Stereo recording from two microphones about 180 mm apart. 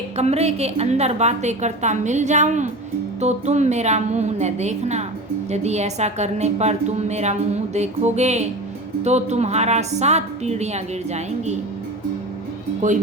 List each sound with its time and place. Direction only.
0.2 s a woman's voice: 35° right (ahead or behind)
12.8 s speech: 45° right (ahead or behind)